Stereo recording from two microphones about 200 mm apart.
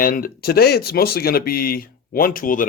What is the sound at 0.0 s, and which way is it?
Speech, 45° left (ahead or behind).